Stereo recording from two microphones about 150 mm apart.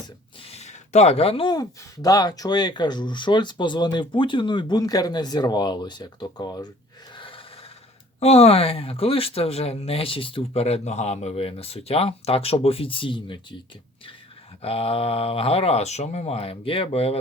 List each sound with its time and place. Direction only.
0.4 s speech: 45° left (ahead or behind); by 6.7 s 25° left (ahead or behind)
7.2 s a sound: 35° left (ahead or behind)
8.2 s speech: 45° left (ahead or behind)
14.6 s speech: 40° left (ahead or behind)